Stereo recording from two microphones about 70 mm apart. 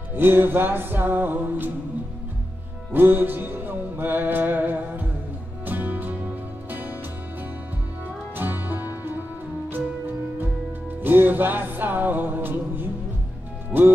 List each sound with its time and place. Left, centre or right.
0.1 s music: right
2.9 s music: right
8.4 s music: right
11.0 s music: right